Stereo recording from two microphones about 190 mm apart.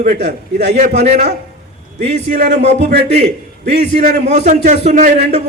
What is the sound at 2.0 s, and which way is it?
Speech, 65° right (ahead or behind).